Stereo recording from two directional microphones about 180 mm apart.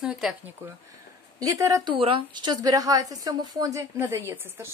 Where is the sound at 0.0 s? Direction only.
5° right (ahead or behind).